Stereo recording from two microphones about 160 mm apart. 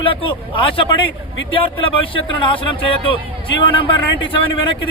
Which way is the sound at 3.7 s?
30° left (ahead or behind).